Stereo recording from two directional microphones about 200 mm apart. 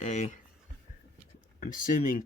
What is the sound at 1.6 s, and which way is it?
Speech, 40° left (ahead or behind).